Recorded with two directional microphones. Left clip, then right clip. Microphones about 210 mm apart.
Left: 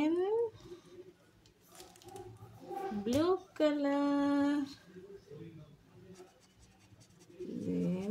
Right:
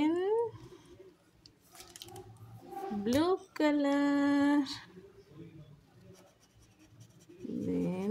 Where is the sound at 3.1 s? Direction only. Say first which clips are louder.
Right 2 dB; 30° right (ahead or behind).